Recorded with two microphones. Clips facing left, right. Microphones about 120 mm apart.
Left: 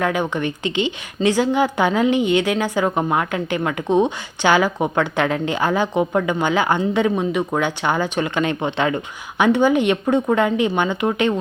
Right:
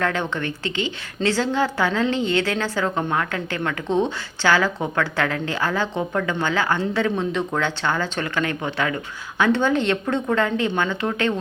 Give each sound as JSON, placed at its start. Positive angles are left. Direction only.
{"t": 0.0, "sound": "a woman's voice", "side_deg": 10}